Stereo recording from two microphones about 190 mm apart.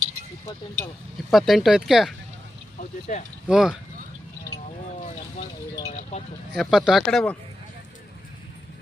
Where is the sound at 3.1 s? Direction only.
40° left (ahead or behind).